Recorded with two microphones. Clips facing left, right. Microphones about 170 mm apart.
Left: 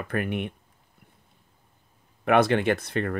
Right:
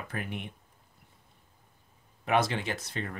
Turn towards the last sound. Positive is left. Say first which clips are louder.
# left 11 dB
turn(degrees=60)  # may be behind; listen again after turning